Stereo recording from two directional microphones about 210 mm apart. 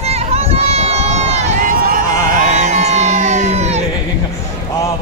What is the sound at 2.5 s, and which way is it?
Crowd, 35° right (ahead or behind).